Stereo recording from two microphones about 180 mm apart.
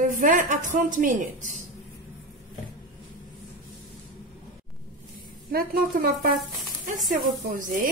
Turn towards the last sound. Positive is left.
turn(degrees=-45)  # may be behind; listen again after turning